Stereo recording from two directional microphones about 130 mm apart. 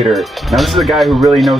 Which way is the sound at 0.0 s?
Centre (ahead or behind).